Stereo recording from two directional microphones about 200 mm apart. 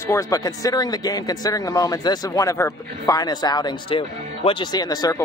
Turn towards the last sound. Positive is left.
turn(degrees=20)  # may be behind; listen again after turning